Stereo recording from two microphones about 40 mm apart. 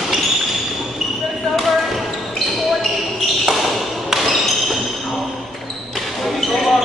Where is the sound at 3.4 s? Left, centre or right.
Centre.